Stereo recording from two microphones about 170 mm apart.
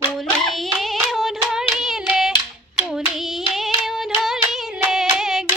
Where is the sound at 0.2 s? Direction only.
Centre (ahead or behind).